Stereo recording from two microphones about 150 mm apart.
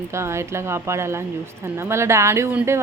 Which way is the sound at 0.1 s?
20° right (ahead or behind).